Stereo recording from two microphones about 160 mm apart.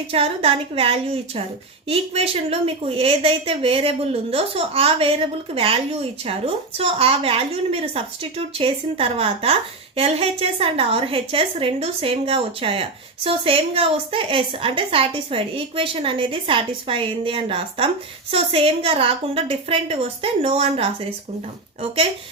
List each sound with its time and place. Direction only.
0.1 s a woman's voice: 35° right (ahead or behind)